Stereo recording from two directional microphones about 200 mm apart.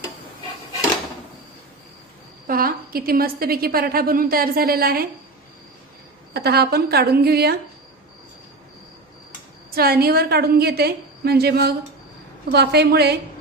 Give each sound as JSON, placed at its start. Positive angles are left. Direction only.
{"t": 2.5, "sound": "a woman's voice", "side_deg": -45}
{"t": 6.3, "sound": "a woman's voice", "side_deg": -50}
{"t": 9.7, "sound": "a woman's voice", "side_deg": -50}